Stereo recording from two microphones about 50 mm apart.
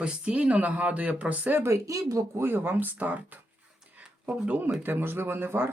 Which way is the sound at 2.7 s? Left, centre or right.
Right.